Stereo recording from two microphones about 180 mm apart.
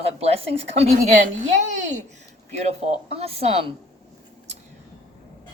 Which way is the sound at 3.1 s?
35° right (ahead or behind).